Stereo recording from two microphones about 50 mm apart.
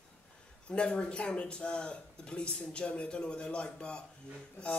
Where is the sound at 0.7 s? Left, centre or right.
Centre.